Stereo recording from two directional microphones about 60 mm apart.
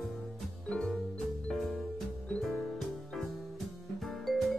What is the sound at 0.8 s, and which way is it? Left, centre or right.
Music, centre.